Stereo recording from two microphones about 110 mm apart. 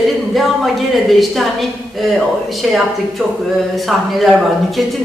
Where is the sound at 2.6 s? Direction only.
Centre (ahead or behind).